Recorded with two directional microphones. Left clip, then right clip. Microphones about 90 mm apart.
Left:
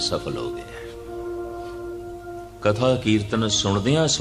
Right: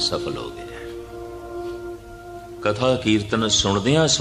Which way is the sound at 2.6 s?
45° left (ahead or behind).